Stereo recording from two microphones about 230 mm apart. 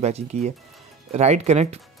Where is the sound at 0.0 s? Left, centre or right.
Right.